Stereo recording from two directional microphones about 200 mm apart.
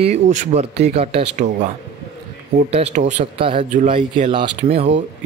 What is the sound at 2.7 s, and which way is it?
Speech, 30° right (ahead or behind).